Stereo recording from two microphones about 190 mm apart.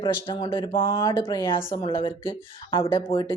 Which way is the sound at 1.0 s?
15° left (ahead or behind).